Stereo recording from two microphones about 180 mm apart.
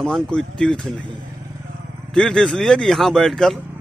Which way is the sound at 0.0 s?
5° left (ahead or behind).